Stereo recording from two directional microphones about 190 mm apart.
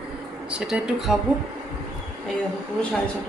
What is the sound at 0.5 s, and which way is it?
Speech, 5° right (ahead or behind).